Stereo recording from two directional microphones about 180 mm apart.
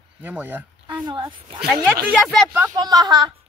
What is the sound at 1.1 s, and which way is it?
Speech, 25° right (ahead or behind).